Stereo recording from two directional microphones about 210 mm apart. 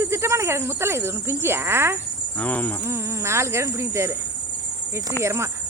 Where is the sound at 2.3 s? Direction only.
10° left (ahead or behind).